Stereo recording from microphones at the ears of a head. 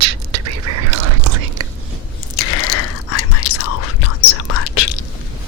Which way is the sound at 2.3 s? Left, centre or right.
Left.